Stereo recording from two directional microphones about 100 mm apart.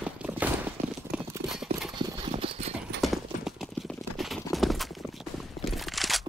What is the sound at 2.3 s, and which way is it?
Clip-clop, 75° right (ahead or behind).